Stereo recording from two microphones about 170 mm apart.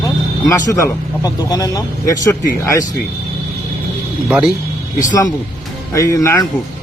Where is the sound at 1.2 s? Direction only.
20° left (ahead or behind).